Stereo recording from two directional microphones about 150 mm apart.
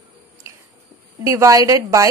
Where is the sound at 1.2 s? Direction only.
20° right (ahead or behind).